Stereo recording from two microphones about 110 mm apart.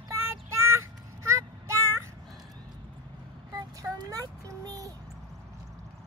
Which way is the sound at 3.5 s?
35° right (ahead or behind).